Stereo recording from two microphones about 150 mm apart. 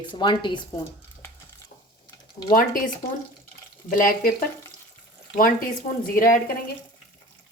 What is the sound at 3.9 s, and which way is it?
Speech, 65° left (ahead or behind).